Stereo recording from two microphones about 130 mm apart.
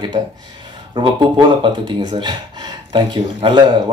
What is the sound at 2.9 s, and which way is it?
Speech, 35° right (ahead or behind).